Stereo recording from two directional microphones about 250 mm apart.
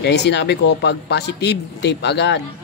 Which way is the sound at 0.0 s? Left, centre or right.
Left.